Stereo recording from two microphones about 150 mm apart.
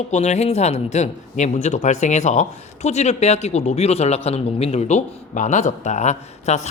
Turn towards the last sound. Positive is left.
turn(degrees=50)  # may be behind; listen again after turning